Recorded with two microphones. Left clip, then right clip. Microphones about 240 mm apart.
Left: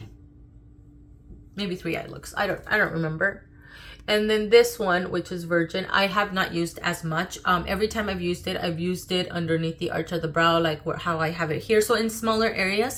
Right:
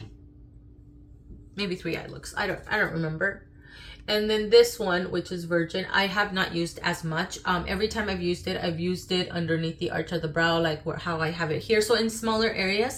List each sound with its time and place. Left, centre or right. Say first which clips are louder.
1.5 s speech: left 1 dB; centre